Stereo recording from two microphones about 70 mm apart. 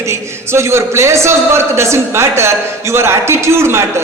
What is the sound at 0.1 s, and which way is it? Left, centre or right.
A man's voice, right.